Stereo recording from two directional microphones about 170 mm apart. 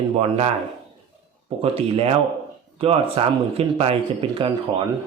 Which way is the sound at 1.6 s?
35° right (ahead or behind).